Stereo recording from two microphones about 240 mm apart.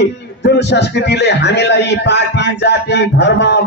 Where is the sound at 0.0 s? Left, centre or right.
Left.